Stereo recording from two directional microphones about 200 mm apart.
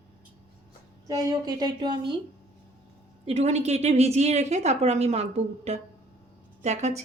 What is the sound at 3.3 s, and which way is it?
A woman's voice, 30° right (ahead or behind).